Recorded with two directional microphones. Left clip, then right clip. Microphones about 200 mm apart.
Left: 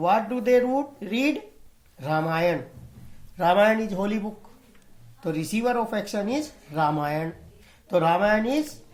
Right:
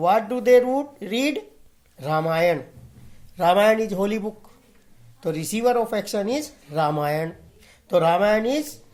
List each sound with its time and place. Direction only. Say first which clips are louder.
0.0 s speech: right 3 dB; 50° right (ahead or behind)
5.2 s speech: right 4 dB; 50° right (ahead or behind)